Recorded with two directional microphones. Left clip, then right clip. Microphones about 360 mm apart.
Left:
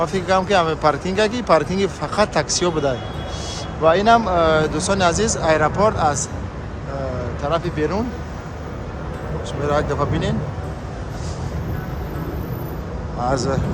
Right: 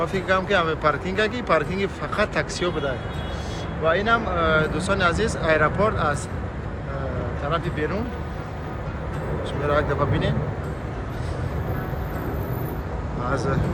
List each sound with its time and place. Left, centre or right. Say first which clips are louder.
0.0 s speech: left 4 dB; centre
7.4 s speech: left 5 dB; centre
9.6 s speech: left 2 dB; centre